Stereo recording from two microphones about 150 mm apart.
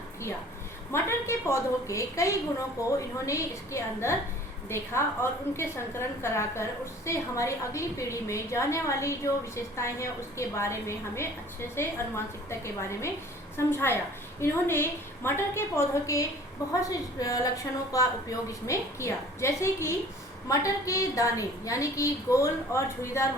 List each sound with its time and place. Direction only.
0.9 s a woman's voice: 15° left (ahead or behind)